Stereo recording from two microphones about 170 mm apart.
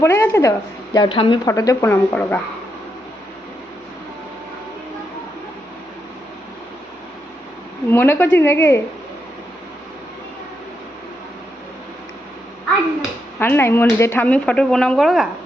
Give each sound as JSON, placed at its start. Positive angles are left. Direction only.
{"t": 0.0, "sound": "speech", "side_deg": 15}
{"t": 0.9, "sound": "a woman's voice", "side_deg": 30}
{"t": 1.5, "sound": "speech", "side_deg": 20}
{"t": 7.9, "sound": "speech", "side_deg": 15}
{"t": 13.4, "sound": "speech", "side_deg": 15}